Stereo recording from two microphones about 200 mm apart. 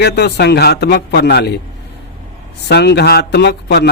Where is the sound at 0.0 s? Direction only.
60° left (ahead or behind).